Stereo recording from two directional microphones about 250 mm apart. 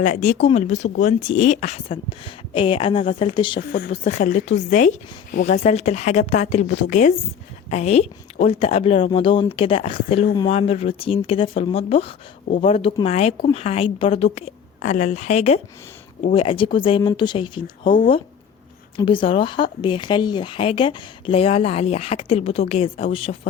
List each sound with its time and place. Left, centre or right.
0.0 s speech: left
3.7 s speech: left
7.7 s speech: left
17.9 s speech: left
18.9 s speech: left